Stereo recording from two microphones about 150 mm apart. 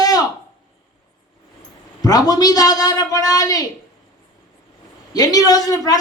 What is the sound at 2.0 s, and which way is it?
Speech, 25° left (ahead or behind).